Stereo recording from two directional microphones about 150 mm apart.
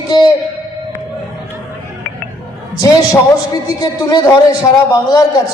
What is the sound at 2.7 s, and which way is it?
A man's voice, 25° left (ahead or behind).